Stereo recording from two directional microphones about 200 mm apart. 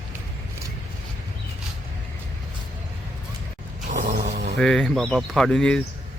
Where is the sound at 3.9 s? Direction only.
40° right (ahead or behind).